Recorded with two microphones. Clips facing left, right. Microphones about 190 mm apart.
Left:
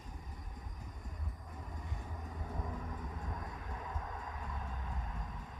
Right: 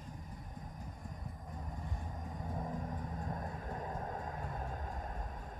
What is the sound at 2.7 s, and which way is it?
Vehicle, 35° right (ahead or behind).